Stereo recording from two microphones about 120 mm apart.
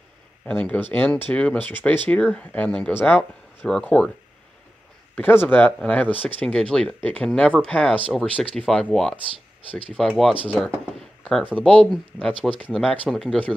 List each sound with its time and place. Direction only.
0.5 s speech: 15° left (ahead or behind)
5.1 s speech: 15° left (ahead or behind)
10.5 s speech: 10° right (ahead or behind)
11.6 s speech: 5° left (ahead or behind)